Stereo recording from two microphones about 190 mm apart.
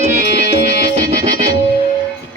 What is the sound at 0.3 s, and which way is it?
Music, 60° left (ahead or behind).